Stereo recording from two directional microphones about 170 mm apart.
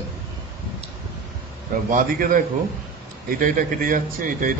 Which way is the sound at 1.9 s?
55° right (ahead or behind).